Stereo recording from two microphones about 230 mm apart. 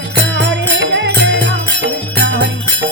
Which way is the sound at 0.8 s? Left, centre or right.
Right.